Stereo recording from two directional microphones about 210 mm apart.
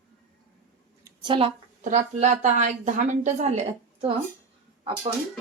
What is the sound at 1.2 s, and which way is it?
Speech, 25° right (ahead or behind).